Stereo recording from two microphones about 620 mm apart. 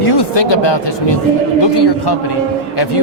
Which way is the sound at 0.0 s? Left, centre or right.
Left.